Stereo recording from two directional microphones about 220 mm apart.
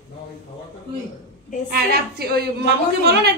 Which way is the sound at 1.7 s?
45° right (ahead or behind).